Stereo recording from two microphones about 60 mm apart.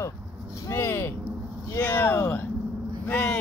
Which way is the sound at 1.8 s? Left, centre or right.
Left.